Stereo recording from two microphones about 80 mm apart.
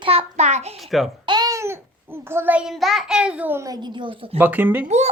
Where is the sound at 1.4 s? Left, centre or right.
Right.